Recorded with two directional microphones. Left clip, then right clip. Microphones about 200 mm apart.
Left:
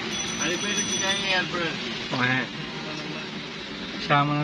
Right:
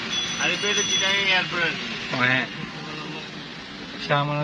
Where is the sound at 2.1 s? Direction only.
5° left (ahead or behind).